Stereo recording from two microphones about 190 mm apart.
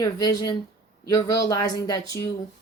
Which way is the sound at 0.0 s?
20° left (ahead or behind).